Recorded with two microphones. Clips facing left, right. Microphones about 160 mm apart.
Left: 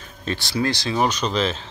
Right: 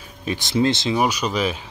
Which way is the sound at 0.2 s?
15° right (ahead or behind).